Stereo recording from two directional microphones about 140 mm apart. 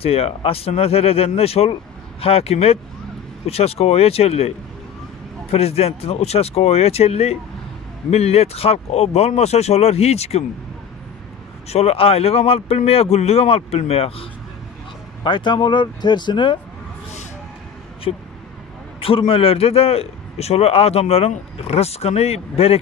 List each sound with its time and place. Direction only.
0.0 s a man's voice: 45° left (ahead or behind)
11.7 s a man's voice: 45° left (ahead or behind)
15.2 s speech: 35° left (ahead or behind)
18.1 s a man's voice: 45° left (ahead or behind)